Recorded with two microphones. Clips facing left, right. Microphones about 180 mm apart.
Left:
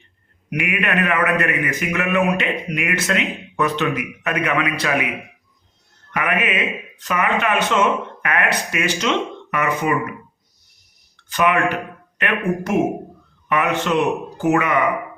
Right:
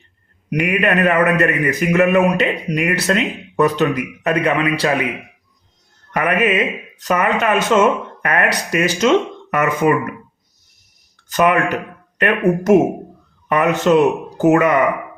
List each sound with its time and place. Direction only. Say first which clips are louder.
0.6 s a man's voice: right 6 dB; 35° right (ahead or behind)
6.1 s a man's voice: right 5 dB; 40° right (ahead or behind)
11.3 s a man's voice: right 3 dB; 40° right (ahead or behind)